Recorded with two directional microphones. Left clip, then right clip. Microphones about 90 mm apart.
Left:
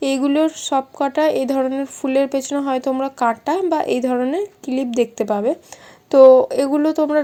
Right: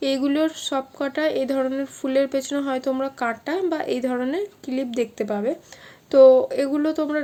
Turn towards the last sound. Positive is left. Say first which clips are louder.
# left 5 dB
turn(degrees=40)  # may be behind; listen again after turning